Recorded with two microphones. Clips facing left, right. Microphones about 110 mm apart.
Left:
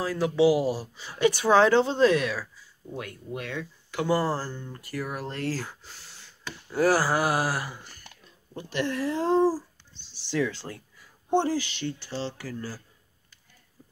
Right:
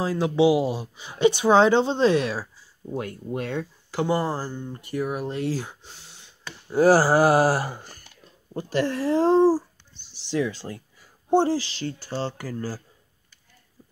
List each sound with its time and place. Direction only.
0.0 s speech: 25° right (ahead or behind)
10.3 s speech: 15° right (ahead or behind)
11.2 s speech: 30° right (ahead or behind)